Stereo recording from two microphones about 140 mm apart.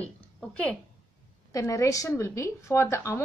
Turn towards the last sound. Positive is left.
turn(degrees=20)  # may be behind; listen again after turning